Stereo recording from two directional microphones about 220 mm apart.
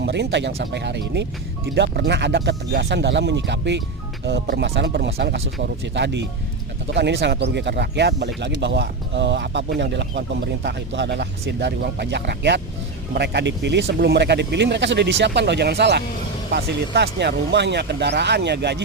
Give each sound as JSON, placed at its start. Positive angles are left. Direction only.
{"t": 0.0, "sound": "speech", "side_deg": -50}